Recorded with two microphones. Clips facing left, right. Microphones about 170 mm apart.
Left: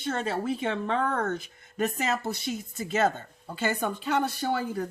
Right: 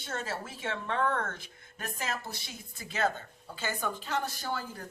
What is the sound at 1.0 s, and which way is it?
Speech, 40° left (ahead or behind).